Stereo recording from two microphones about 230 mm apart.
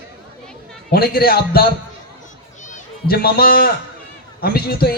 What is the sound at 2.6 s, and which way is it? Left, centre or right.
Children playing, left.